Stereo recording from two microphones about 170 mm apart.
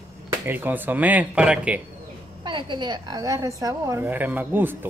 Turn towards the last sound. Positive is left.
turn(degrees=-10)  # may be behind; listen again after turning